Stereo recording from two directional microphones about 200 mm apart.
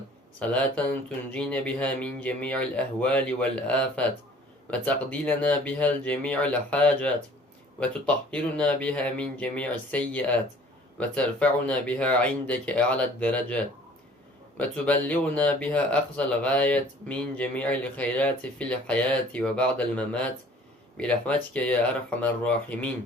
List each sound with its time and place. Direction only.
0.3 s speech: 5° left (ahead or behind)